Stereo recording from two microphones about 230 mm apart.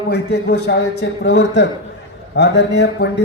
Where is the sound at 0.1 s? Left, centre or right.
Left.